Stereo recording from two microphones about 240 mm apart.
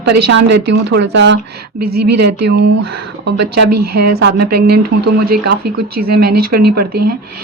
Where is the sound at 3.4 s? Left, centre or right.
Right.